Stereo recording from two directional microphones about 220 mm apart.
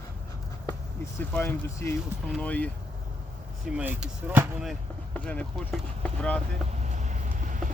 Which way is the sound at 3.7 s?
5° right (ahead or behind).